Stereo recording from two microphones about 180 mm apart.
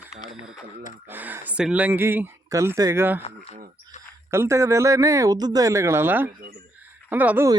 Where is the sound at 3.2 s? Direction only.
35° left (ahead or behind).